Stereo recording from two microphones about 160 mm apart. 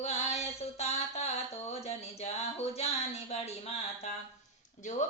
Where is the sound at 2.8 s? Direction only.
40° left (ahead or behind).